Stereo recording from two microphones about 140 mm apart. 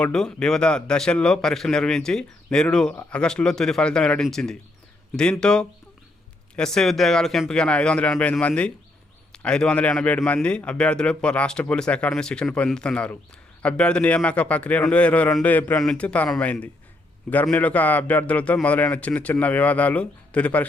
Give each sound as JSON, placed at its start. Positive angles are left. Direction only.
{"t": 0.0, "sound": "a man's voice", "side_deg": 5}